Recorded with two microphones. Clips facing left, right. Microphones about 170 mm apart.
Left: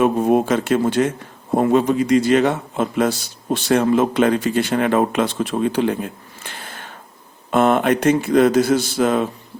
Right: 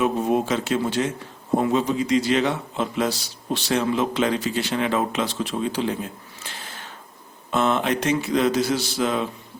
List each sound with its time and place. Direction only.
0.0 s a man's voice: 50° left (ahead or behind)